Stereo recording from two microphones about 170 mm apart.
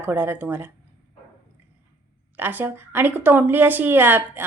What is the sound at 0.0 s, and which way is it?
Speech, 10° right (ahead or behind).